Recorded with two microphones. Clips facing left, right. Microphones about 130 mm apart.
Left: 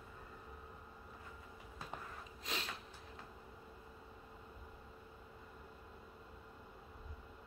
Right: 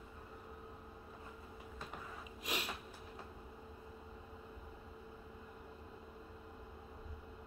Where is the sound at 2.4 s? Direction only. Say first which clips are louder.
Right 3 dB; 15° right (ahead or behind).